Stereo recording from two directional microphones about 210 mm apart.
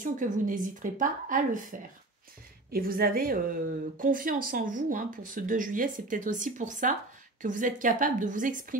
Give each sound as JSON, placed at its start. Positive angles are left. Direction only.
{"t": 0.0, "sound": "a woman's voice", "side_deg": -40}